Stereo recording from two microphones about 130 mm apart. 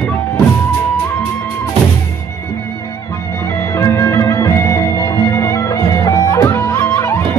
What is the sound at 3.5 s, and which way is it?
Music, 20° left (ahead or behind).